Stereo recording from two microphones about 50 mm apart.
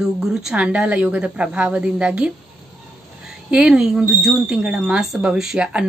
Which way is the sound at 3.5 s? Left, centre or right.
Centre.